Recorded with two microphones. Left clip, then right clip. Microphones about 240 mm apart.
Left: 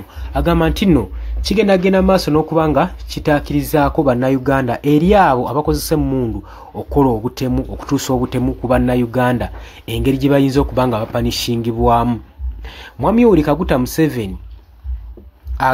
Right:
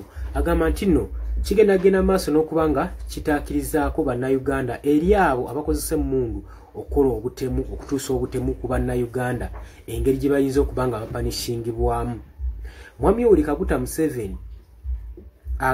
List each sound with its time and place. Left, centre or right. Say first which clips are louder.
0.3 s speech: left 6 dB; left